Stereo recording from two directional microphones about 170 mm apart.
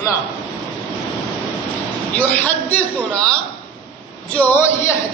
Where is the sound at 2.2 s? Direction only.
10° left (ahead or behind).